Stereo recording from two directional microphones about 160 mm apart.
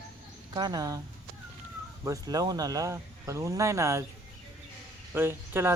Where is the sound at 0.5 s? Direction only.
25° right (ahead or behind).